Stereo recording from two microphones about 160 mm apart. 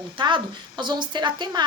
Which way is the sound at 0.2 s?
30° right (ahead or behind).